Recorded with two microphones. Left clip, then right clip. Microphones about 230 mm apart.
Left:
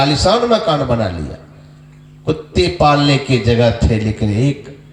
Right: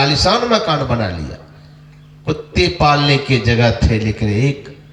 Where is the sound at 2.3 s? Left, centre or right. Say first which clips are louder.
Left 1 dB; right.